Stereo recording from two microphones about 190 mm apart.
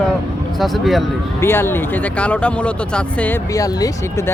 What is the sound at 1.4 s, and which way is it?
Speech, 10° left (ahead or behind).